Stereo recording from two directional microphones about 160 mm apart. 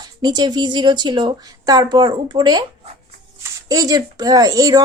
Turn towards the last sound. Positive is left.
turn(degrees=-20)  # may be behind; listen again after turning